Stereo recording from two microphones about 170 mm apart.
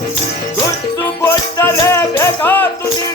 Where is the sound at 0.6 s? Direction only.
15° left (ahead or behind).